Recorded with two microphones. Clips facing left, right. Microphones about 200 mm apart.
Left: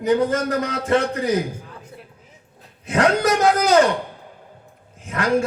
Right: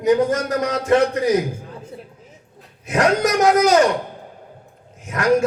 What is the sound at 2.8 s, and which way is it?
Speech, 30° left (ahead or behind).